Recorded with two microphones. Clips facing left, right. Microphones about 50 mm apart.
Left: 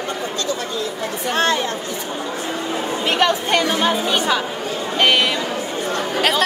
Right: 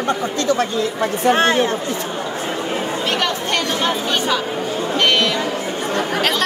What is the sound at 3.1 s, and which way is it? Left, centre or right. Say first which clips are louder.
Speech: left 6 dB; centre.